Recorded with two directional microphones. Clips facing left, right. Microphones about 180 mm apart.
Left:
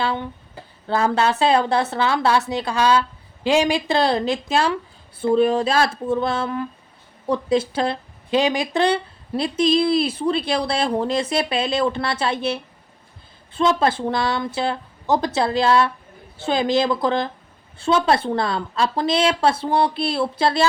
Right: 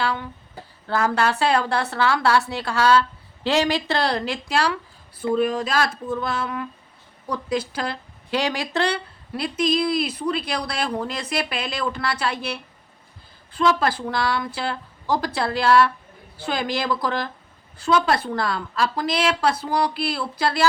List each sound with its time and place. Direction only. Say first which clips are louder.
0.0 s speech: left 2 dB; 25° left (ahead or behind)